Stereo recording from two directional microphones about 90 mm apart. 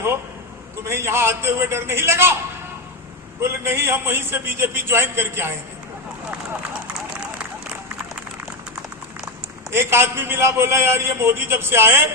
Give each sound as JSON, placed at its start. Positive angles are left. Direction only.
{"t": 0.9, "sound": "a man's voice", "side_deg": -30}
{"t": 3.4, "sound": "a man's voice", "side_deg": -30}
{"t": 9.7, "sound": "a man's voice", "side_deg": -25}